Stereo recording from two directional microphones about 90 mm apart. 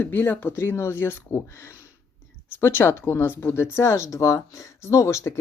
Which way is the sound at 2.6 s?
30° left (ahead or behind).